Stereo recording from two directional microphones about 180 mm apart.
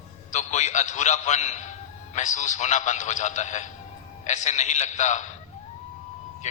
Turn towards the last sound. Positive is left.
turn(degrees=40)  # may be behind; listen again after turning